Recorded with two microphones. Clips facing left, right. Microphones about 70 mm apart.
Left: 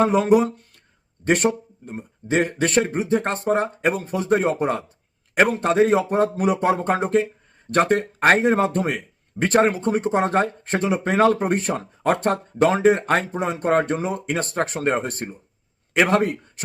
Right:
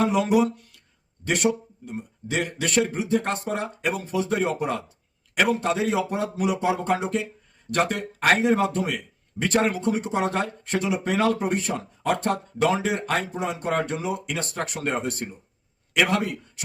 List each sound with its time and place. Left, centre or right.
0.0 s speech: left